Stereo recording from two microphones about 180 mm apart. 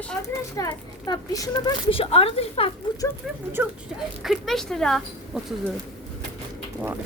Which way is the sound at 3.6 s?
10° right (ahead or behind).